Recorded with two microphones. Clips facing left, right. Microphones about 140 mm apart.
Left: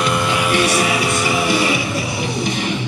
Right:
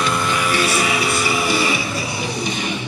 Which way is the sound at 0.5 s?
20° left (ahead or behind).